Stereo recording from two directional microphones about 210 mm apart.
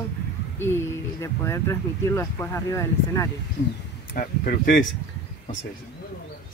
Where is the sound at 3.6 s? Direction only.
50° left (ahead or behind).